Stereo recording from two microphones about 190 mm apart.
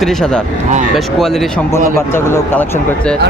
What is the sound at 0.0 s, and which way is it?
Speech, centre (ahead or behind).